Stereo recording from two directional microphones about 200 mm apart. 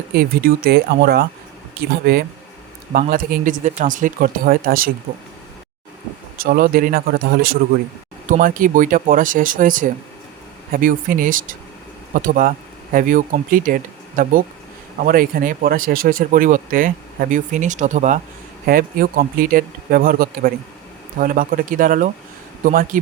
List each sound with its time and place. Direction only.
0.1 s speech: 50° right (ahead or behind)
6.3 s speech: 50° right (ahead or behind)